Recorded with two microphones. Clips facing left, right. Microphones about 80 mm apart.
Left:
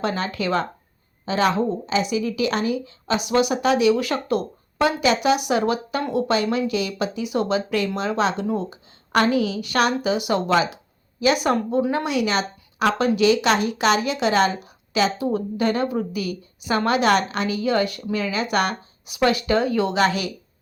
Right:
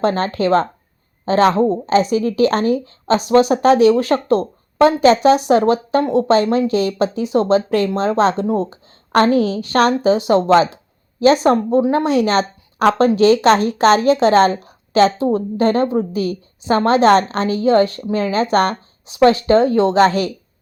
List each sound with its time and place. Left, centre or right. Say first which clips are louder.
0.0 s a woman's voice: right 7 dB; right